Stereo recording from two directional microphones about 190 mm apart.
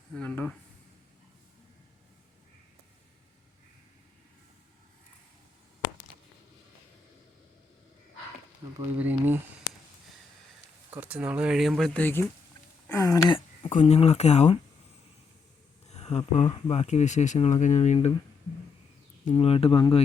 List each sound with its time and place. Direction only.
0.2 s speech: 5° left (ahead or behind)
9.0 s speech: 10° right (ahead or behind)
10.9 s speech: 10° right (ahead or behind); by 13.7 s 25° left (ahead or behind)
13.7 s speech: 35° left (ahead or behind)
15.9 s speech: 35° left (ahead or behind)
19.2 s speech: 35° left (ahead or behind)